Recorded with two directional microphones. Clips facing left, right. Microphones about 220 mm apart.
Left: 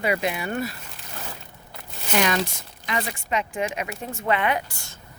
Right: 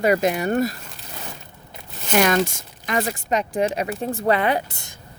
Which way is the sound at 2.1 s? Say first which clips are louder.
Right 5 dB; 50° right (ahead or behind).